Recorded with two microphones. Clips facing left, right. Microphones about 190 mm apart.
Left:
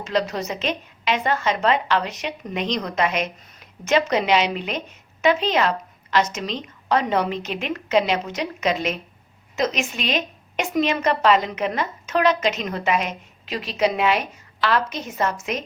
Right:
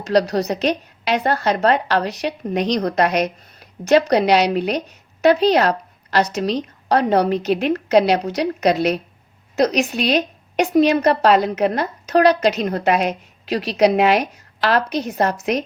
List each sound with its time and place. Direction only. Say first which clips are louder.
0.0 s a woman's voice: right 6 dB; 40° right (ahead or behind)
13.7 s a woman's voice: right 5 dB; 75° right (ahead or behind)
14.2 s a woman's voice: right 4 dB; 40° right (ahead or behind)
15.2 s a woman's voice: right 3 dB; 65° right (ahead or behind)